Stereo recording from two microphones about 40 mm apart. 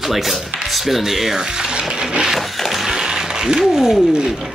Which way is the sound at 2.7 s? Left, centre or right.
Centre.